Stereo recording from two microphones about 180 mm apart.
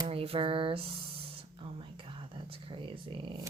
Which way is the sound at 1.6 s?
30° right (ahead or behind).